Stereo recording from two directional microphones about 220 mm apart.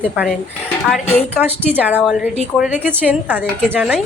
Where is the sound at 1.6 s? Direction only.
5° right (ahead or behind).